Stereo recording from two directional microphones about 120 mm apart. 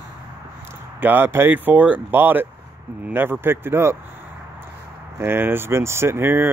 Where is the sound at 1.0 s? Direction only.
15° right (ahead or behind).